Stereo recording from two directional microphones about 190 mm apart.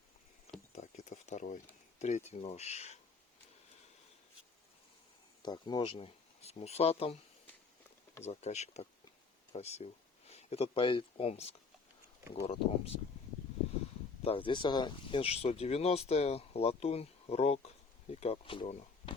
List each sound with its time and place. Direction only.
0.8 s speech: 40° left (ahead or behind)
5.4 s speech: 20° left (ahead or behind)
8.2 s speech: 35° left (ahead or behind)
12.5 s speech: 30° left (ahead or behind)
14.3 s speech: 25° left (ahead or behind)